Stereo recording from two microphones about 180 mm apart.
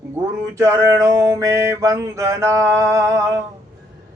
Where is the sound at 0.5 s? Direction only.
15° right (ahead or behind).